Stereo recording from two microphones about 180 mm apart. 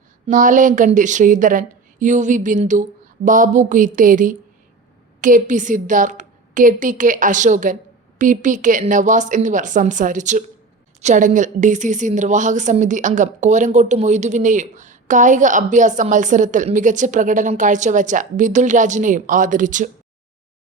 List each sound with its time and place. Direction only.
0.3 s a woman's voice: 45° right (ahead or behind)